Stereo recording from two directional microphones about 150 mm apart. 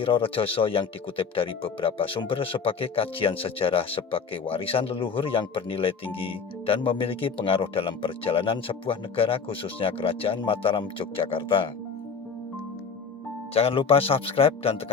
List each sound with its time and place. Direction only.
0.0 s speech: 35° left (ahead or behind)
13.5 s speech: 40° left (ahead or behind)